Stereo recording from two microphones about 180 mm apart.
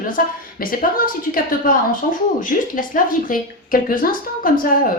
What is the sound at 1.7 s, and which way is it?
A woman's voice, 50° left (ahead or behind).